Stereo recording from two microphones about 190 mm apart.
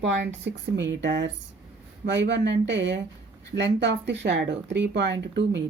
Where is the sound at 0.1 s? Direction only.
70° right (ahead or behind).